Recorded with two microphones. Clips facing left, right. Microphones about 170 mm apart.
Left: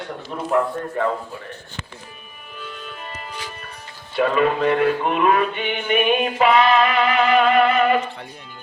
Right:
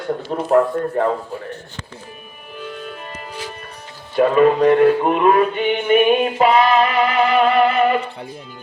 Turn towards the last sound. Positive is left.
turn(degrees=-35)  # may be behind; listen again after turning